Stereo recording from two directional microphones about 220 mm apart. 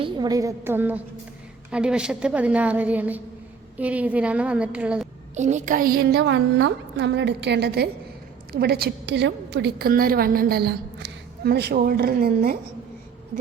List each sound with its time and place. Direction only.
0.0 s a woman's voice: 20° right (ahead or behind)
5.3 s a woman's voice: 30° right (ahead or behind)